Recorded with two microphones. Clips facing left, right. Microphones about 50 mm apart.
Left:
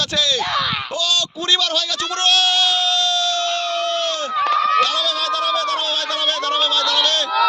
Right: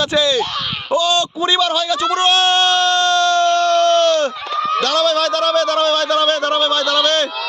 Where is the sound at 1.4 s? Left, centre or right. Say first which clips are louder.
Right 4 dB; centre; by 4.3 s right.